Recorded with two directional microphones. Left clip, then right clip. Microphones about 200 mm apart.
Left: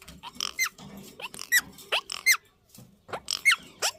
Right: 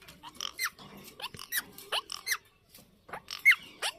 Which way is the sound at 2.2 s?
60° left (ahead or behind).